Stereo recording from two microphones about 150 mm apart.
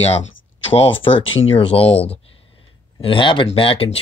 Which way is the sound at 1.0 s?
40° left (ahead or behind).